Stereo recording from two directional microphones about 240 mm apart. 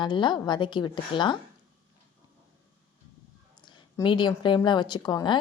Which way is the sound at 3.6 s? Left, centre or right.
Centre.